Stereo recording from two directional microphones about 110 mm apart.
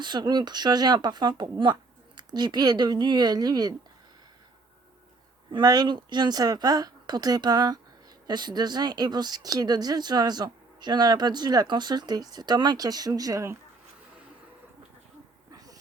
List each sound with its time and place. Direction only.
0.0 s speech: 40° right (ahead or behind)
5.5 s speech: 40° right (ahead or behind)